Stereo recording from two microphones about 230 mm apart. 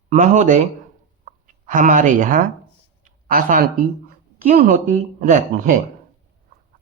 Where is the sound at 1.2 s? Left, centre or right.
Right.